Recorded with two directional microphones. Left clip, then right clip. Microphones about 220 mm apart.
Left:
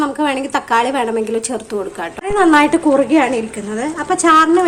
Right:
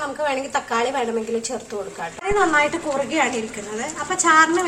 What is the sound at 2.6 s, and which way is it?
A woman's voice, 50° left (ahead or behind).